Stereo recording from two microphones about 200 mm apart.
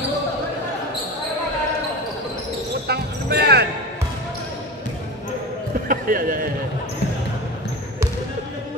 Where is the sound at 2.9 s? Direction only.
55° right (ahead or behind).